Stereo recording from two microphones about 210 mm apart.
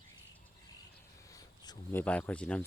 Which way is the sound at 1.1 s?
15° left (ahead or behind).